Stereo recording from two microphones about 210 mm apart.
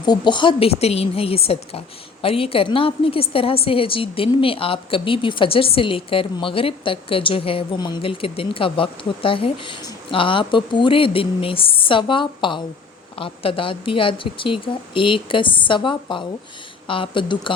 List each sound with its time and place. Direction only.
0.0 s a woman's voice: 20° left (ahead or behind)